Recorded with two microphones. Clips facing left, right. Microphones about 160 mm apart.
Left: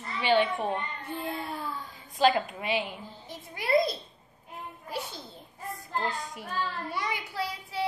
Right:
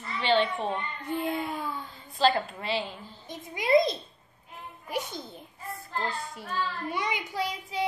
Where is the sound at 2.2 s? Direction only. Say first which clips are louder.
Left 1 dB; 15° left (ahead or behind).